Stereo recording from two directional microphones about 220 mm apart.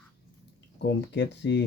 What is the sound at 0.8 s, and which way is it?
Speech, 50° left (ahead or behind).